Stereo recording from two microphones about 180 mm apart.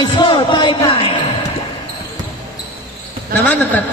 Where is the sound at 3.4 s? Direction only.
10° left (ahead or behind).